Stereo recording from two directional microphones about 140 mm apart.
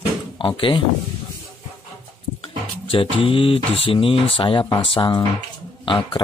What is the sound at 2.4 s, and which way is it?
Speech, 40° left (ahead or behind).